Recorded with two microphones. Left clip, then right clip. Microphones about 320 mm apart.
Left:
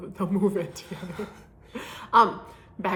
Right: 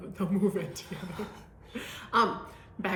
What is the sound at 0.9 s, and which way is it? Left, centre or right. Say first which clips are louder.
Speech: left 5 dB; centre.